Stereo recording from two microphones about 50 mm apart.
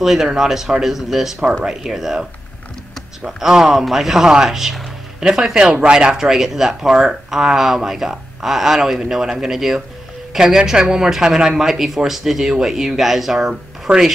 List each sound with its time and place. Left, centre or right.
0.0 s speech: centre
3.3 s speech: centre
13.9 s speech: right